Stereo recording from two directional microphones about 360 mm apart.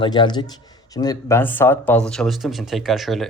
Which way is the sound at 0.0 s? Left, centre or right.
Centre.